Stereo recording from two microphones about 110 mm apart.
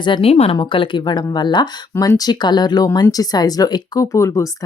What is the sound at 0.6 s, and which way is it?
Speech, 50° left (ahead or behind).